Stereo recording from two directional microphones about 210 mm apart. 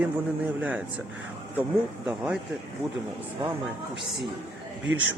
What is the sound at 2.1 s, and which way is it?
Speech, 5° right (ahead or behind).